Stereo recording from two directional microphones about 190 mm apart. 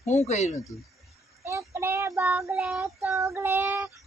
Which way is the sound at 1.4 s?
15° right (ahead or behind).